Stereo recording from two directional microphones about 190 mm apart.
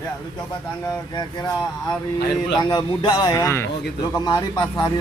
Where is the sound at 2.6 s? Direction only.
20° left (ahead or behind).